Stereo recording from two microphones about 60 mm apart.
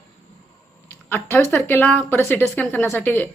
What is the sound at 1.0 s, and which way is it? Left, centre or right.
Speech, left.